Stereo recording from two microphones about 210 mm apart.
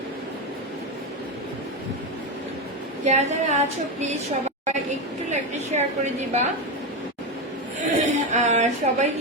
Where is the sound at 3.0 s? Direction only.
30° right (ahead or behind).